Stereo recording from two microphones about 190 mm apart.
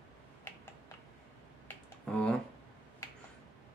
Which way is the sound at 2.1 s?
5° left (ahead or behind).